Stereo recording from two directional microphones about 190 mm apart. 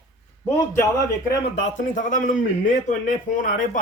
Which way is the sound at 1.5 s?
40° left (ahead or behind).